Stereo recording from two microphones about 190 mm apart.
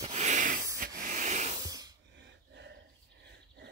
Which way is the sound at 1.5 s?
20° right (ahead or behind).